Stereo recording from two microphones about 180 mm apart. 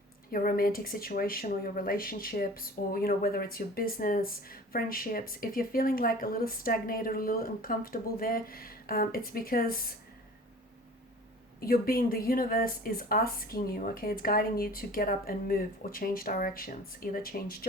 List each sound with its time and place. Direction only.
0.3 s speech: 55° left (ahead or behind)
11.6 s speech: 55° left (ahead or behind)